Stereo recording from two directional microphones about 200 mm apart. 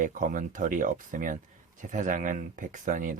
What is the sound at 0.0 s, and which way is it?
Speech, 40° right (ahead or behind).